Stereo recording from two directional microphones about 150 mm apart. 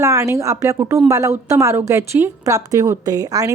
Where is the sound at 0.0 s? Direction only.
20° right (ahead or behind).